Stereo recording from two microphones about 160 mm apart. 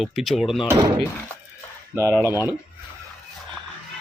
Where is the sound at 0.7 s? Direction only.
25° right (ahead or behind).